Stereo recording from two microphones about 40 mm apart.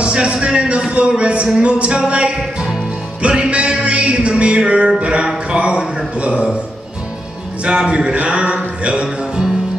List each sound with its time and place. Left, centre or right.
0.0 s music: right
7.6 s music: right